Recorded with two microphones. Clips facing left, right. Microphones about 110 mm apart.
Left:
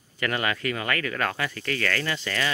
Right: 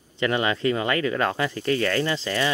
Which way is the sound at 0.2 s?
25° right (ahead or behind).